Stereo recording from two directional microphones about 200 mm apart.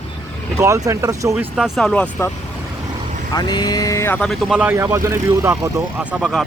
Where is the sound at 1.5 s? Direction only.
Centre (ahead or behind).